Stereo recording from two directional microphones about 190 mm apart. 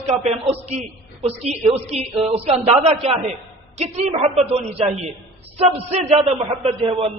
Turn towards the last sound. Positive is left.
turn(degrees=-30)  # may be behind; listen again after turning